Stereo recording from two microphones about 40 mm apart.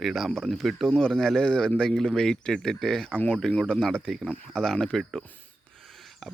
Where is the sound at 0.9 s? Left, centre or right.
Centre.